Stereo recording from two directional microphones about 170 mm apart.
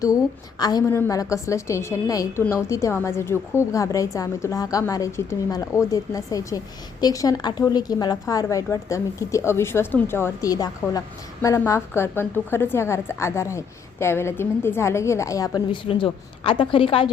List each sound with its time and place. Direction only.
0.6 s a woman's voice: 20° left (ahead or behind)